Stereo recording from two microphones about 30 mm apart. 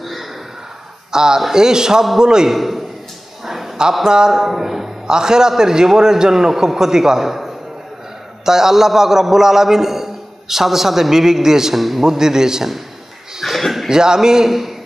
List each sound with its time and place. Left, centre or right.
0.0 s a sound: centre
1.1 s a man's voice: right
2.5 s a man's voice: centre
3.4 s a sound: centre
4.0 s a man's voice: right
4.3 s speech: centre
5.0 s a man's voice: right
11.7 s a man's voice: centre
12.0 s a man's voice: centre
13.4 s a sound: centre
13.8 s a man's voice: right
14.5 s a man's voice: centre